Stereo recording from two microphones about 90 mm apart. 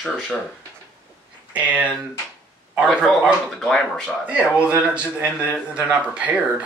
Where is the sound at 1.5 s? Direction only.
15° right (ahead or behind).